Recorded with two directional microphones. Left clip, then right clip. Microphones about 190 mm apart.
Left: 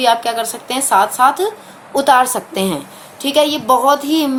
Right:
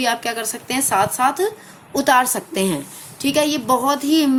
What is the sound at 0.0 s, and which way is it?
Speech, 45° right (ahead or behind).